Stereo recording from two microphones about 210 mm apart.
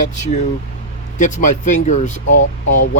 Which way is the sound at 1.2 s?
35° left (ahead or behind).